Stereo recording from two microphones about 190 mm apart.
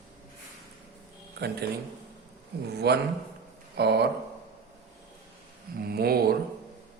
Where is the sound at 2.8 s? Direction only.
60° right (ahead or behind).